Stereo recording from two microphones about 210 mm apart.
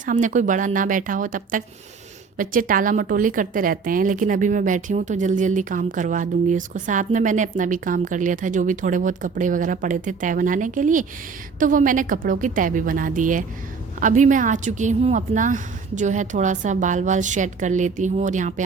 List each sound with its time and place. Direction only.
0.0 s a woman's voice: 40° right (ahead or behind)